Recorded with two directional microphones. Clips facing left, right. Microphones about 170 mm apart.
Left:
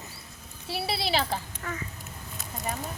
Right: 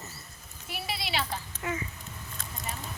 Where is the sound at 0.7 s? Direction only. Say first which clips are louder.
Left 6 dB; 35° left (ahead or behind).